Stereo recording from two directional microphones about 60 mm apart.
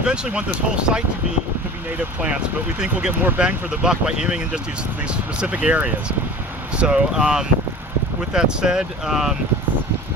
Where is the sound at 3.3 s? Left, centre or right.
Centre.